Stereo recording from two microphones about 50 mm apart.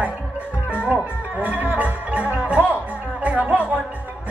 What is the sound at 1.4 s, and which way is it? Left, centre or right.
Music, right.